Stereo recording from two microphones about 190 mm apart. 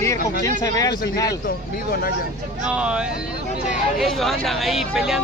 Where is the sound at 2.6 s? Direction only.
5° right (ahead or behind).